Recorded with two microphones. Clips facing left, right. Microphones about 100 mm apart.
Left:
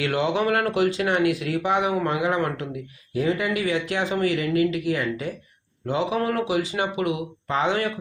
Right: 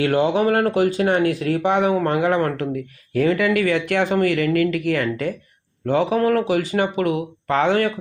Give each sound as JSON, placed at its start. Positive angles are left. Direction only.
{"t": 0.0, "sound": "speech", "side_deg": -40}